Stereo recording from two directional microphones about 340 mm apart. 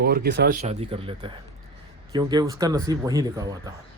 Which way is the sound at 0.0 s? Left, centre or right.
Right.